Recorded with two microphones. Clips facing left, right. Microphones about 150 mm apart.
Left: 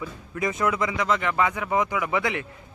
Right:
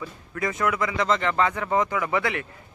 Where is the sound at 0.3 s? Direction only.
20° left (ahead or behind).